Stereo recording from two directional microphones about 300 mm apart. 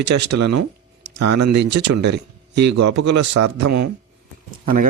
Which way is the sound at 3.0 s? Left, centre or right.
Right.